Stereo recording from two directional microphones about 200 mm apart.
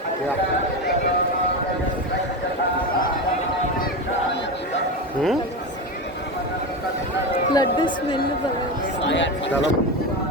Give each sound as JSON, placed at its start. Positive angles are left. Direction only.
{"t": 7.5, "sound": "a woman's voice", "side_deg": 20}
{"t": 9.0, "sound": "a man's voice", "side_deg": 65}